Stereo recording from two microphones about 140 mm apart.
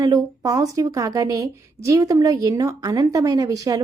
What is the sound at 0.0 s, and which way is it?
A woman's voice, 25° right (ahead or behind).